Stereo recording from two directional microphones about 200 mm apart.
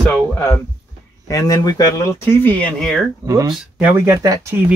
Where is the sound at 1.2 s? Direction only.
15° left (ahead or behind).